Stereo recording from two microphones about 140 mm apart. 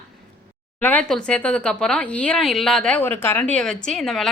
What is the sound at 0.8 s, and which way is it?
A woman's voice, 10° left (ahead or behind).